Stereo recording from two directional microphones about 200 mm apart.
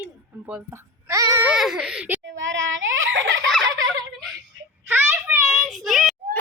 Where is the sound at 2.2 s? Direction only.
70° right (ahead or behind).